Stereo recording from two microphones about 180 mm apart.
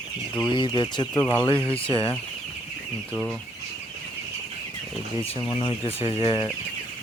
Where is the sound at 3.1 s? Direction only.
Centre (ahead or behind).